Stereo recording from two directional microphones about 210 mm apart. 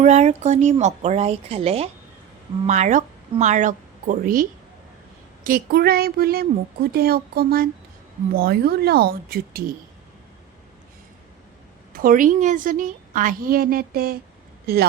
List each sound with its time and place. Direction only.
0.0 s a woman's voice: 30° right (ahead or behind)
11.9 s a woman's voice: 40° right (ahead or behind)